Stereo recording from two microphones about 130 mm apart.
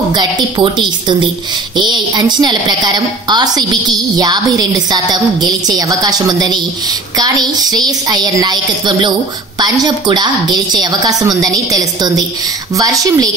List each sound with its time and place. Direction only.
0.1 s a woman's voice: 35° right (ahead or behind)